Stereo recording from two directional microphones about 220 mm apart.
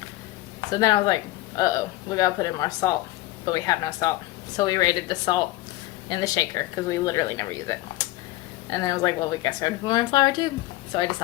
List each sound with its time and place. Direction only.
0.7 s a woman's voice: 20° left (ahead or behind)